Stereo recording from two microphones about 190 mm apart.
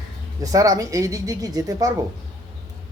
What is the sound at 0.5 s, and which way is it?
Speech, 20° right (ahead or behind).